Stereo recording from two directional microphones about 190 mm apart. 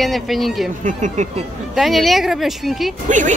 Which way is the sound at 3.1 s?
40° right (ahead or behind).